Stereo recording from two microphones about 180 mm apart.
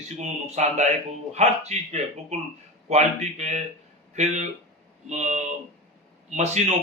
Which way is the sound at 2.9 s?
40° right (ahead or behind).